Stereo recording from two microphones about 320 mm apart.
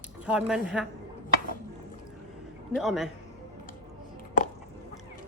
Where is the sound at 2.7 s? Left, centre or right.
Centre.